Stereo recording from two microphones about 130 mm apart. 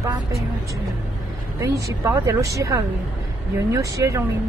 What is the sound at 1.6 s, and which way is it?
Speech, 25° right (ahead or behind).